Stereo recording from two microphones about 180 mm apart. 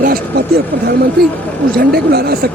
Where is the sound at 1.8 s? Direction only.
60° right (ahead or behind).